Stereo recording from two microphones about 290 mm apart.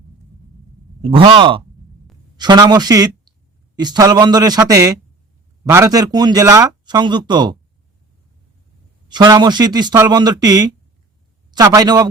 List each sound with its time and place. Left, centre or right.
1.0 s a man's voice: centre
9.0 s speech: centre